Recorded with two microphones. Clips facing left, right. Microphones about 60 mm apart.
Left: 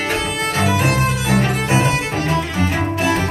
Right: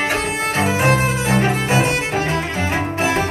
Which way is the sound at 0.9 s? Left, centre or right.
Right.